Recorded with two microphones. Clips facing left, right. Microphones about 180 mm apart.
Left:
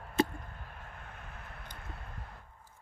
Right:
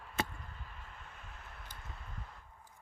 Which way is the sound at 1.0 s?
60° left (ahead or behind).